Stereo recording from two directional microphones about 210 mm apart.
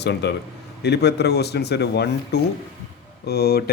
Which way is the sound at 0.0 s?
55° left (ahead or behind).